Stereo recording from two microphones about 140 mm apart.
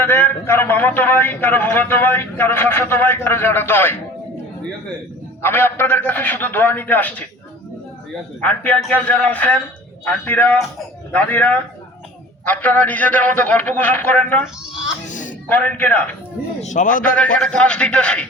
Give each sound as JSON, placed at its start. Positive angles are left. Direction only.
{"t": 0.0, "sound": "a man's voice", "side_deg": 15}
{"t": 5.4, "sound": "a man's voice", "side_deg": 15}
{"t": 8.4, "sound": "a man's voice", "side_deg": 10}
{"t": 15.0, "sound": "a sound", "side_deg": 65}
{"t": 15.4, "sound": "a man's voice", "side_deg": 10}
{"t": 16.6, "sound": "a man's voice", "side_deg": 65}
{"t": 17.2, "sound": "a man's voice", "side_deg": 5}